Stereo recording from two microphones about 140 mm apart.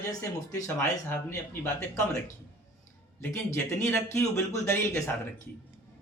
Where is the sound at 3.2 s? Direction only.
15° left (ahead or behind).